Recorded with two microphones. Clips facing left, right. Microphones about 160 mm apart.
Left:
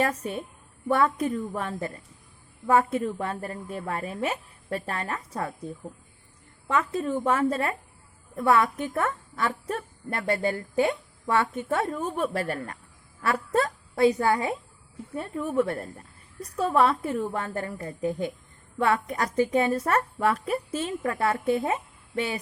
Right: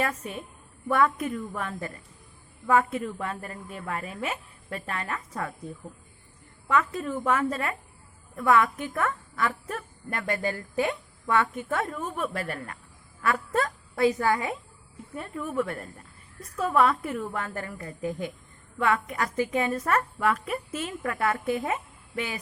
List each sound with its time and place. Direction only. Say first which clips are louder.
0.0 s a woman's voice: left 3 dB; 35° left (ahead or behind)
6.7 s a woman's voice: even; 30° left (ahead or behind)